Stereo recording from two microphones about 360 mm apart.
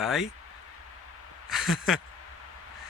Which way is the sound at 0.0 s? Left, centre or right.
Centre.